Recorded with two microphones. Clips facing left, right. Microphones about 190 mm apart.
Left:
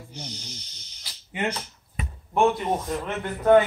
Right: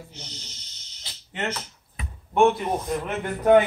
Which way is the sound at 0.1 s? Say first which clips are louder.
Left 5 dB; 10° left (ahead or behind).